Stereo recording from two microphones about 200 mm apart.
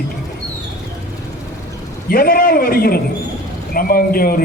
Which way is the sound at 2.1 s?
45° left (ahead or behind).